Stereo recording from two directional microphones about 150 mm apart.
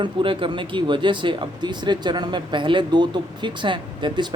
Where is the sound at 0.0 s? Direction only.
35° right (ahead or behind).